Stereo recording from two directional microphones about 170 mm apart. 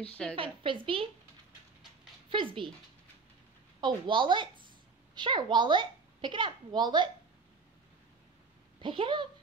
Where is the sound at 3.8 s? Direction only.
30° right (ahead or behind).